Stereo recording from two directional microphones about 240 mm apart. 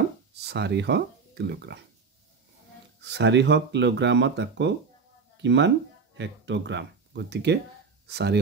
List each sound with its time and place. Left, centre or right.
0.4 s speech: right
3.0 s speech: right